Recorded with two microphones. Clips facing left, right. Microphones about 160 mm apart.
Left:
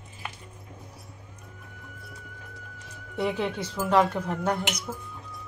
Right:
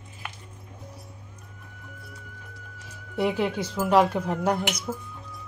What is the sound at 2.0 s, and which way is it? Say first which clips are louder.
Music: even; centre (ahead or behind).